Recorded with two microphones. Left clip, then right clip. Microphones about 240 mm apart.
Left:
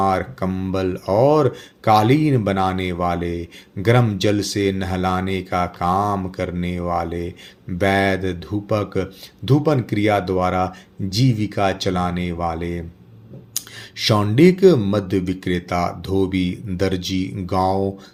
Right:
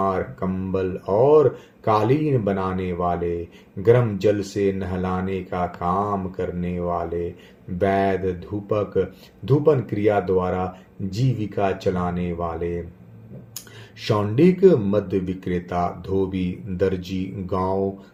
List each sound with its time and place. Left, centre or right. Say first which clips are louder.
0.0 s speech: left 4 dB; left
14.0 s speech: left 4 dB; left